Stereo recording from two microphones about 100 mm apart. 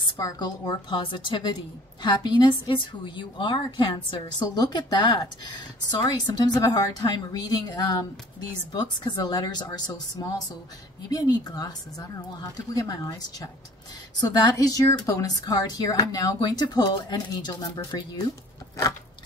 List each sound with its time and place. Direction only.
0.2 s a woman's voice: 45° left (ahead or behind)